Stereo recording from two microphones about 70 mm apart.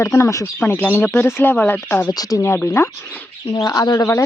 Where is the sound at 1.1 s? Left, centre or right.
Left.